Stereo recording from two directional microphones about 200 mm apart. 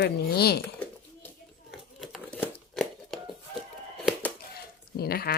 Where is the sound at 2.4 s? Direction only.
Centre (ahead or behind).